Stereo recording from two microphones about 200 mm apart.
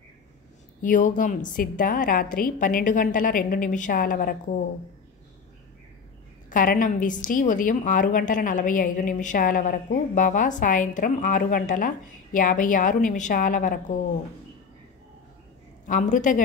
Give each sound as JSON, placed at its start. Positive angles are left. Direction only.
{"t": 0.8, "sound": "a woman's voice", "side_deg": 40}
{"t": 6.5, "sound": "a woman's voice", "side_deg": 45}
{"t": 15.9, "sound": "a woman's voice", "side_deg": 40}